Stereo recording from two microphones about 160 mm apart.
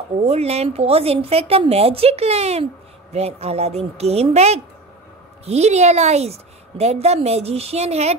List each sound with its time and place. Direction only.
0.2 s a woman's voice: 40° right (ahead or behind)